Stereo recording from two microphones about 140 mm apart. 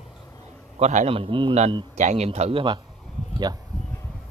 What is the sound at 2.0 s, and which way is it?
Speech, 55° right (ahead or behind).